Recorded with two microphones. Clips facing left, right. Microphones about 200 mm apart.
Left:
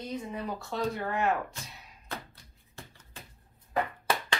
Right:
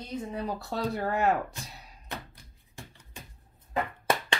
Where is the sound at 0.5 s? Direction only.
35° right (ahead or behind).